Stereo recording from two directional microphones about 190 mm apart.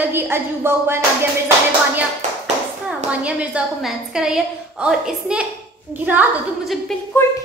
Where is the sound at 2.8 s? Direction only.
5° right (ahead or behind).